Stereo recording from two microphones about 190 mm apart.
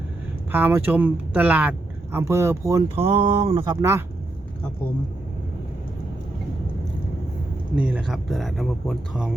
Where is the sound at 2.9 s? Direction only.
30° right (ahead or behind); by 4.0 s 15° right (ahead or behind).